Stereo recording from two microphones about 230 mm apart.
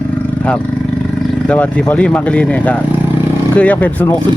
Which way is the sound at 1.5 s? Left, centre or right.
Centre.